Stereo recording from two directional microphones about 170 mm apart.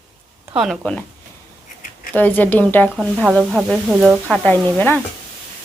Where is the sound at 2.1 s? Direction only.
10° left (ahead or behind).